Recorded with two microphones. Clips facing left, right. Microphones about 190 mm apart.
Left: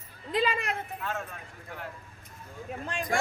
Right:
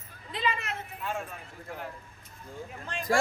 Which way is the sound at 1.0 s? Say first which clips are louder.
Even; 10° right (ahead or behind).